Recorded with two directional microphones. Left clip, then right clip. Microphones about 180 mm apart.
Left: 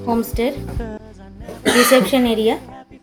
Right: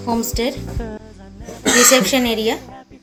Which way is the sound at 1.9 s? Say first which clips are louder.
Left 1 dB; 15° left (ahead or behind).